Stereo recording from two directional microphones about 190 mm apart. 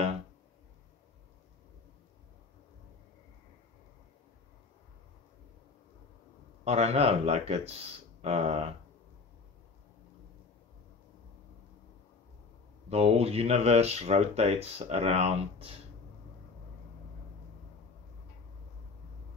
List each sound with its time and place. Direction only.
6.6 s speech: 35° right (ahead or behind)
12.9 s speech: 35° right (ahead or behind)